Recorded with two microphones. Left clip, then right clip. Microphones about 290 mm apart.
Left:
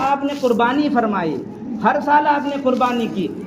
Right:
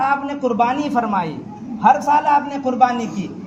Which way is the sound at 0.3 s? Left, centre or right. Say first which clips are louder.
Left 1 dB; right.